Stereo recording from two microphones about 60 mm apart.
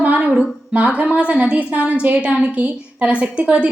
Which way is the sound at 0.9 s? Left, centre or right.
Right.